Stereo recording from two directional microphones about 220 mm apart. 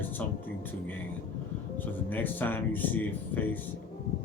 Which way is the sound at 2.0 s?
10° left (ahead or behind).